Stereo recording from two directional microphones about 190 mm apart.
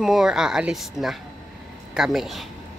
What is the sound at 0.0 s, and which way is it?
Speech, centre (ahead or behind).